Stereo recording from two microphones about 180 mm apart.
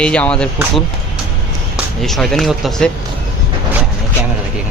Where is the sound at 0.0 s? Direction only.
5° left (ahead or behind).